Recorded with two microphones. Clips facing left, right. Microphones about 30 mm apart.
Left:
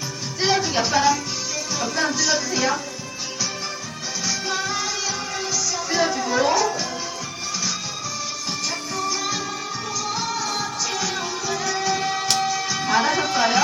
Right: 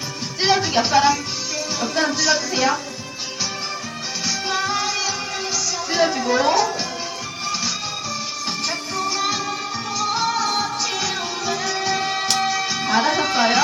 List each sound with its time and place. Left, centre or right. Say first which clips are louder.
0.6 s speech: right 3 dB; centre
4.4 s music: right 5 dB; centre
9.0 s music: right 4 dB; right
12.8 s music: right 1 dB; centre